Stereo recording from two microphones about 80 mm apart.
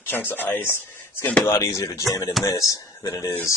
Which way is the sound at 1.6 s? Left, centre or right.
Left.